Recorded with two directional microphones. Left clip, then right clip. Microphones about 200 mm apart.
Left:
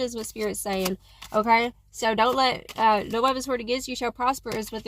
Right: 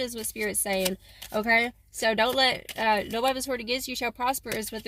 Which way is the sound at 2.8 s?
15° right (ahead or behind).